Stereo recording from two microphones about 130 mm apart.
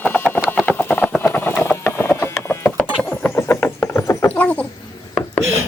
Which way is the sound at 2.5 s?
15° left (ahead or behind).